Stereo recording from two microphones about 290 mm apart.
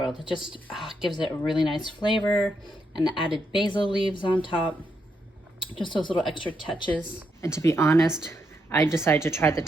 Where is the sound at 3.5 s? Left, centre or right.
Centre.